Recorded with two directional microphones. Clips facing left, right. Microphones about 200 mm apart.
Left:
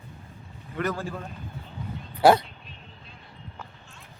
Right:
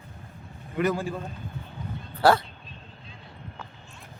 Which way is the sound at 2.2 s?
15° left (ahead or behind).